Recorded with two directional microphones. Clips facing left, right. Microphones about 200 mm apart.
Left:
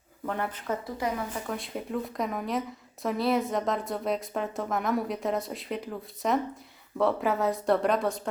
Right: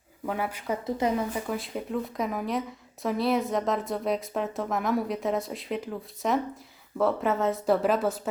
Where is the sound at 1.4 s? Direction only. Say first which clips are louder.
Right 2 dB; centre (ahead or behind).